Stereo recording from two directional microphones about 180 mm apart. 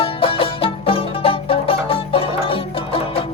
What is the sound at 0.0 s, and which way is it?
Music, 30° left (ahead or behind).